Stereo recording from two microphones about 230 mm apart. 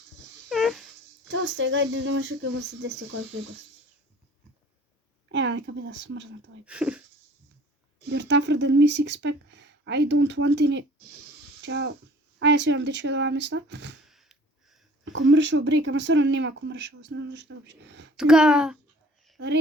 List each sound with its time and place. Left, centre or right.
0.4 s a sound: centre
1.3 s speech: right
5.3 s speech: right
6.7 s speech: centre
8.1 s speech: right
14.1 s sniff: centre
15.0 s speech: right
18.2 s speech: centre